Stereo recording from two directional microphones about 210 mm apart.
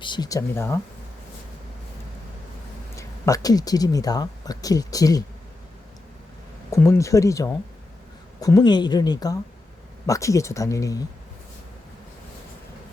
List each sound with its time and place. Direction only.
0.0 s speech: 20° left (ahead or behind)
2.9 s speech: 15° left (ahead or behind)
6.7 s speech: 15° left (ahead or behind)